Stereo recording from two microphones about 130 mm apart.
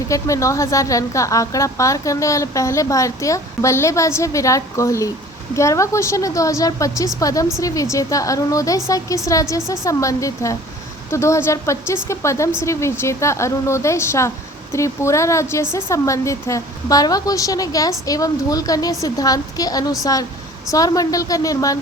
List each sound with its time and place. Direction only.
0.1 s a woman's voice: 25° left (ahead or behind)